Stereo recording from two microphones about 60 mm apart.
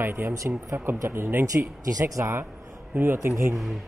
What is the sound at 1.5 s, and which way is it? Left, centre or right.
Speech, right.